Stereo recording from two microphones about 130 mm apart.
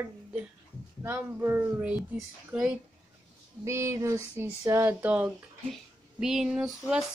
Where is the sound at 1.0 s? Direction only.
20° right (ahead or behind).